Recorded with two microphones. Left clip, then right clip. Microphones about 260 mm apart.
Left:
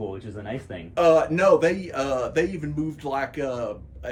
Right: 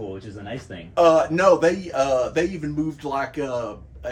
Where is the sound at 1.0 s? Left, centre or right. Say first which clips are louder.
Right 2 dB; centre.